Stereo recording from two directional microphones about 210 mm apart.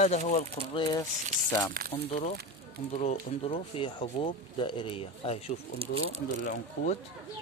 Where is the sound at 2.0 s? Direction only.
30° left (ahead or behind).